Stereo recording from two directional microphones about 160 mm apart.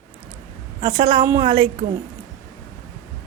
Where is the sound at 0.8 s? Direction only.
30° right (ahead or behind).